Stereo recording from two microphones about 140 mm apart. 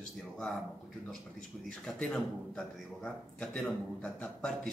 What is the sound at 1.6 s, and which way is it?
A man's voice, 5° left (ahead or behind).